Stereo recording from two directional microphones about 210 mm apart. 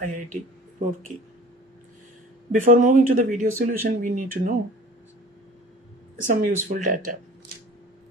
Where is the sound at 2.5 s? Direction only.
35° right (ahead or behind).